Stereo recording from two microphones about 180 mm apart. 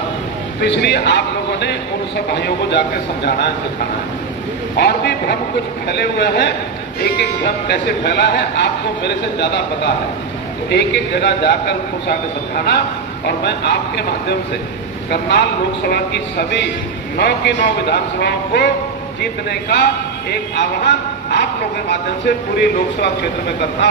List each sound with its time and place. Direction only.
0.6 s speech: 70° left (ahead or behind)
4.8 s speech: 65° left (ahead or behind)
15.8 s speech: 65° left (ahead or behind)
22.6 s speech: 65° left (ahead or behind)